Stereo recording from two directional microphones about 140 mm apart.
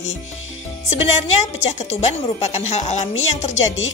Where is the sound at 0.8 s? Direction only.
50° left (ahead or behind).